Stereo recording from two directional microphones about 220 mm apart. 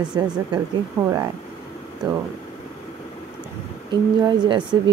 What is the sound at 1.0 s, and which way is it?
Speech, 10° right (ahead or behind).